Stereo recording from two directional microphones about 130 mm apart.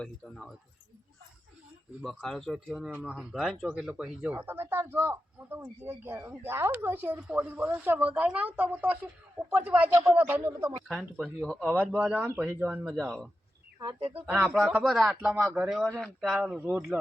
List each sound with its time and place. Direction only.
0.0 s speech: centre (ahead or behind)
2.0 s speech: centre (ahead or behind)
4.4 s speech: 15° right (ahead or behind)
10.8 s speech: centre (ahead or behind)
11.6 s speech: 10° right (ahead or behind)
13.7 s speech: 40° right (ahead or behind)
14.3 s speech: 15° right (ahead or behind)
14.9 s speech: centre (ahead or behind)
15.4 s a man's voice: 20° right (ahead or behind)
15.6 s speech: centre (ahead or behind)